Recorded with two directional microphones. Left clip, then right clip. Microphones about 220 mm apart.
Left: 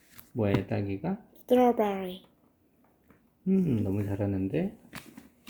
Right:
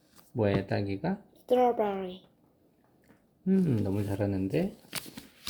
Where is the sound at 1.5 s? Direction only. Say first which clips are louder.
Left 1 dB; 15° left (ahead or behind).